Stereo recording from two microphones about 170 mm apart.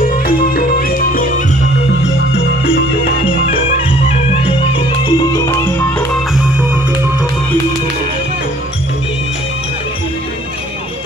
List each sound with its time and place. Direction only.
0.1 s music: 55° left (ahead or behind)
4.3 s music: 35° left (ahead or behind)
5.3 s music: 20° left (ahead or behind)